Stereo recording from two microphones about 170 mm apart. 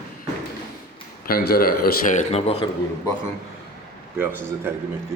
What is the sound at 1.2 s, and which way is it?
Speech, 60° left (ahead or behind).